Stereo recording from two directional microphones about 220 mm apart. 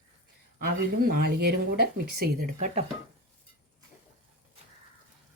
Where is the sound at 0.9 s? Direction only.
45° right (ahead or behind).